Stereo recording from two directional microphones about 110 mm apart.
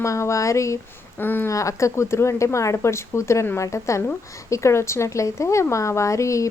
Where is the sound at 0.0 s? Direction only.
25° left (ahead or behind).